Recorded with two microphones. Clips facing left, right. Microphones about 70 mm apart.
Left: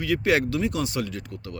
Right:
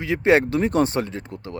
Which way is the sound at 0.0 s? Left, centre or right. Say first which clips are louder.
Right 4 dB; right.